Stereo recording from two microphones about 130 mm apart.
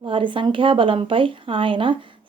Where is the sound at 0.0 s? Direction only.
40° right (ahead or behind).